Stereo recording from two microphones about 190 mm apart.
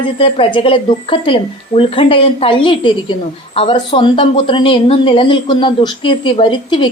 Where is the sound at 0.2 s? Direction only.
30° left (ahead or behind).